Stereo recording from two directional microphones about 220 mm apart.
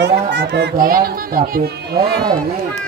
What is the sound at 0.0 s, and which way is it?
Speech, 50° right (ahead or behind).